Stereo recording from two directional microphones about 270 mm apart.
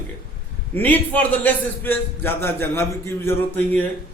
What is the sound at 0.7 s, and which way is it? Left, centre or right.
A man's voice, centre.